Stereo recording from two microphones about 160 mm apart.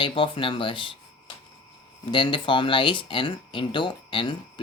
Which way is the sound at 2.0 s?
30° left (ahead or behind).